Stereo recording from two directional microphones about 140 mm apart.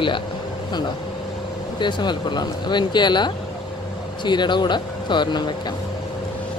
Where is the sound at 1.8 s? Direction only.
35° left (ahead or behind).